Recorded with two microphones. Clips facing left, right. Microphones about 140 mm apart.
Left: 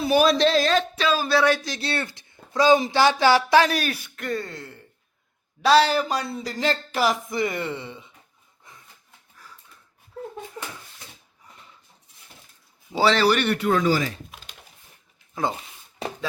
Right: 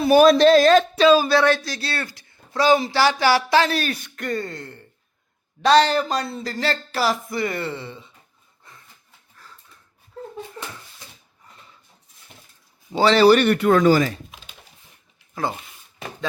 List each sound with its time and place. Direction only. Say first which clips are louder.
0.1 s speech: right 6 dB; 50° right (ahead or behind)
1.3 s speech: right 2 dB; 10° left (ahead or behind)
8.7 s a sound: right 1 dB; 15° left (ahead or behind)
10.6 s a sound: left 1 dB; 10° left (ahead or behind)
12.9 s speech: right 2 dB; 5° left (ahead or behind)
13.2 s a man's voice: right 7 dB; 40° right (ahead or behind)
13.5 s speech: right 5 dB; 60° right (ahead or behind)